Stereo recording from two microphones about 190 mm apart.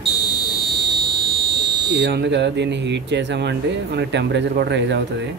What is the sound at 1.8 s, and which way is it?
Speech, 70° right (ahead or behind).